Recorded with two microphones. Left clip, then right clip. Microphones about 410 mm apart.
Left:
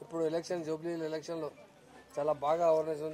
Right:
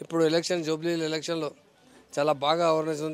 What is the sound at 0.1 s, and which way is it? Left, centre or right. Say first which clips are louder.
A man's voice: right 9 dB; right.